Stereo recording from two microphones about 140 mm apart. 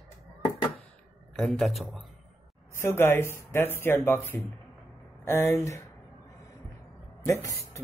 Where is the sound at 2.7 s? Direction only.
15° left (ahead or behind).